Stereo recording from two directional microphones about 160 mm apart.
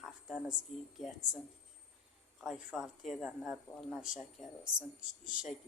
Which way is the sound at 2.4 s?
Centre (ahead or behind).